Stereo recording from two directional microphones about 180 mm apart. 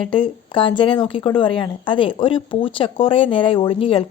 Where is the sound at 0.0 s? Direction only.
30° left (ahead or behind).